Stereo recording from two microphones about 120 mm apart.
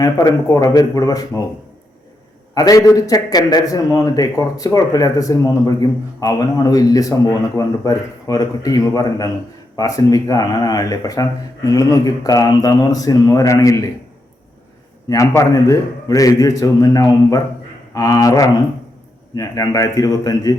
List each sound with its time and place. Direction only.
0.0 s speech: 30° left (ahead or behind)
2.6 s a man's voice: 30° left (ahead or behind)
15.4 s a man's voice: 30° left (ahead or behind)